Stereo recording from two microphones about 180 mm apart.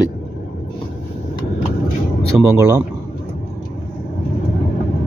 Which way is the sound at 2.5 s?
15° right (ahead or behind).